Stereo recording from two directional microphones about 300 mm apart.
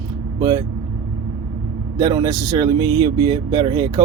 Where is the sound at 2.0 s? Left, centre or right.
Centre.